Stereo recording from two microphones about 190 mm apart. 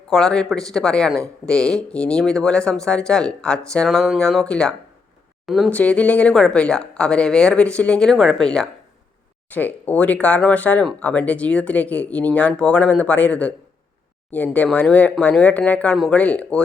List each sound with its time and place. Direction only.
0.1 s speech: centre (ahead or behind)